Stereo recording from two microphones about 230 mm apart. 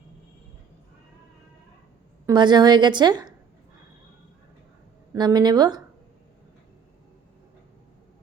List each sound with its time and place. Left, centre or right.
2.2 s a woman's voice: centre
5.1 s speech: centre